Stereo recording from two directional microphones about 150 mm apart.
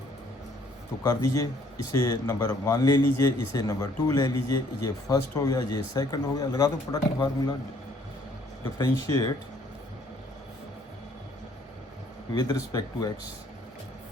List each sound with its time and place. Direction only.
1.0 s speech: 20° left (ahead or behind)
8.8 s speech: 20° left (ahead or behind)
12.3 s speech: 25° left (ahead or behind)